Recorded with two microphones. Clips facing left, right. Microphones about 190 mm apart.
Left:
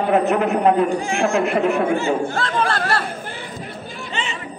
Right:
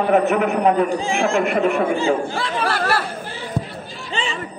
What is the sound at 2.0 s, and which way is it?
Speech, 10° right (ahead or behind).